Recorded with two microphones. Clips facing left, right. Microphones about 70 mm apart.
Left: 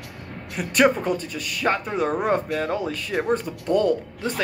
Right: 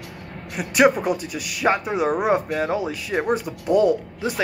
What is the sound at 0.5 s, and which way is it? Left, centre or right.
Speech, centre.